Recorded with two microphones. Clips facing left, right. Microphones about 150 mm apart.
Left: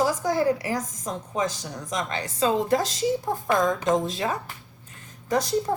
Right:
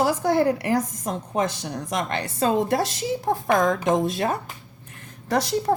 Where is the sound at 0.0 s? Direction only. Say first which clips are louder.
Right 3 dB; 60° right (ahead or behind).